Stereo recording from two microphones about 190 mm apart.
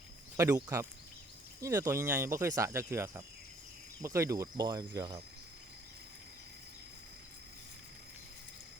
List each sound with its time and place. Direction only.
0.3 s speech: 15° right (ahead or behind)